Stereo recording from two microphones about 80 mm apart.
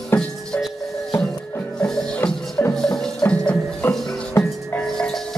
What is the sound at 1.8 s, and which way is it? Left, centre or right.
Music, centre.